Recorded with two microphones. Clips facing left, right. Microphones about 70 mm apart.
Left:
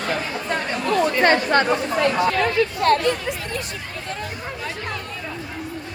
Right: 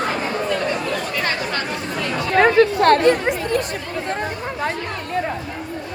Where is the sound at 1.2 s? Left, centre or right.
Left.